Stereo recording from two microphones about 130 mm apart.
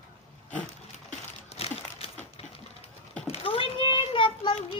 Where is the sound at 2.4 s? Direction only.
50° left (ahead or behind).